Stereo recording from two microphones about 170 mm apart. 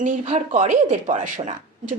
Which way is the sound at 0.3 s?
40° right (ahead or behind).